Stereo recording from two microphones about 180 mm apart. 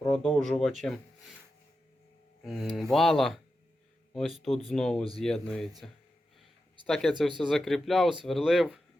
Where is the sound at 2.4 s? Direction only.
Centre (ahead or behind).